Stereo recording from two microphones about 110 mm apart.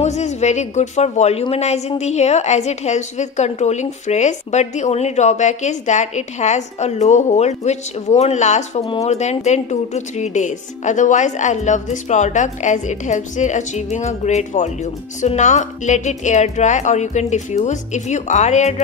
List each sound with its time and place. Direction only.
0.0 s speech: 90° left